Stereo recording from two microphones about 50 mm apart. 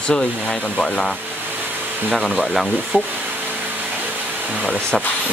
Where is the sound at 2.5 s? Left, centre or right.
Centre.